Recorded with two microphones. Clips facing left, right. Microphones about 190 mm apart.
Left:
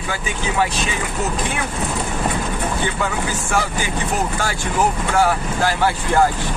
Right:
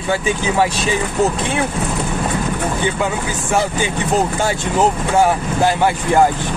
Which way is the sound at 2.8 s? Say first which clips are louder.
Right 3 dB; 20° right (ahead or behind).